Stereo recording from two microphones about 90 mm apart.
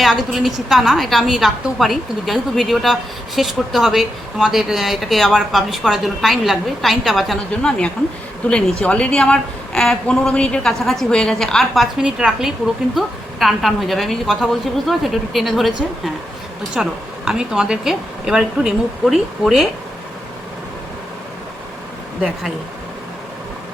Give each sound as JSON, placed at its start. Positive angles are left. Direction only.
{"t": 0.0, "sound": "a woman's voice", "side_deg": 0}
{"t": 7.5, "sound": "a woman's voice", "side_deg": 10}
{"t": 16.7, "sound": "a woman's voice", "side_deg": -5}